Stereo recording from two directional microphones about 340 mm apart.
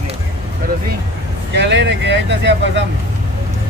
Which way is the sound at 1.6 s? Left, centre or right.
Right.